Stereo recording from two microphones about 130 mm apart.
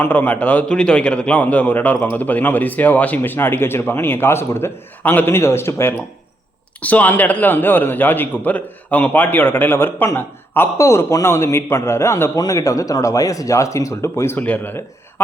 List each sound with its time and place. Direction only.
0.0 s a man's voice: 15° left (ahead or behind)